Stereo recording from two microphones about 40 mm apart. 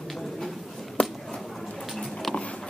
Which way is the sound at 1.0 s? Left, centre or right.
Left.